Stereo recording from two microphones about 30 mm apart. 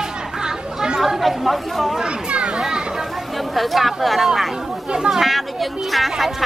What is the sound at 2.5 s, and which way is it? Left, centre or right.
Children playing, right.